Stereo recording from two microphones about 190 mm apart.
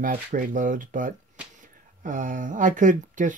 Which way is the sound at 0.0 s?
45° right (ahead or behind).